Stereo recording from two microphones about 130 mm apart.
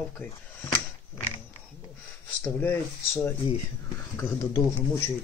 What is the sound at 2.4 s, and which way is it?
Speech, 15° left (ahead or behind).